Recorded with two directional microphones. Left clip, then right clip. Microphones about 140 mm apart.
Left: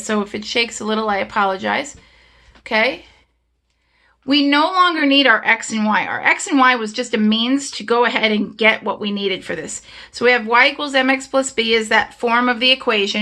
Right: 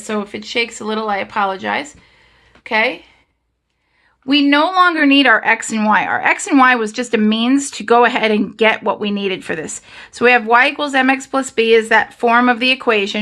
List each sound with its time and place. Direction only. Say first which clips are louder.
0.0 s speech: left 1 dB; 15° left (ahead or behind)
4.3 s speech: right 2 dB; 10° right (ahead or behind); by 13.1 s 30° right (ahead or behind)